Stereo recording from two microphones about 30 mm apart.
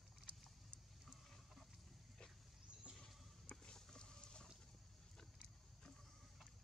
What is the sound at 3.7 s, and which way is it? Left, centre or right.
Horse, centre.